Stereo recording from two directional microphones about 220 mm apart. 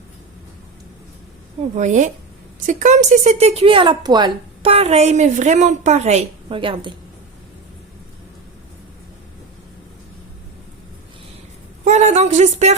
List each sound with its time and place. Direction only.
1.7 s speech: 35° right (ahead or behind)
11.9 s speech: 30° right (ahead or behind)